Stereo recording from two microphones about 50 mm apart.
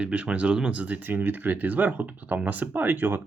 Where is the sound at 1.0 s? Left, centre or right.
Right.